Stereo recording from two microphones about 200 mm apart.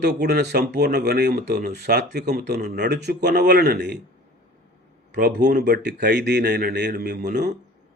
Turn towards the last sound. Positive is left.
turn(degrees=-55)  # may be behind; listen again after turning